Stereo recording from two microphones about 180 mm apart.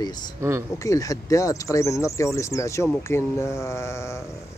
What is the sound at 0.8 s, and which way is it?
Speech, 20° left (ahead or behind).